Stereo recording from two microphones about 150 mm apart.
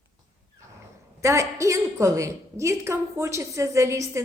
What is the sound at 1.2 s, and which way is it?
Speech, 20° right (ahead or behind).